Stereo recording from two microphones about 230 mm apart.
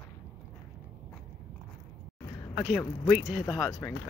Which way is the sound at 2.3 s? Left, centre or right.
Centre.